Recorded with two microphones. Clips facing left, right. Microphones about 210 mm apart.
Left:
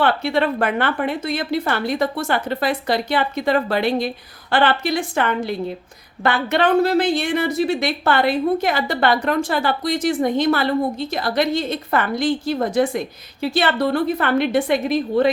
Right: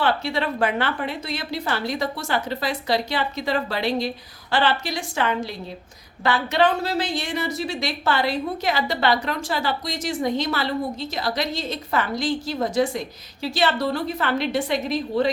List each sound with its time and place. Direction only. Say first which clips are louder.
0.0 s a woman's voice: left 5 dB; 55° left (ahead or behind)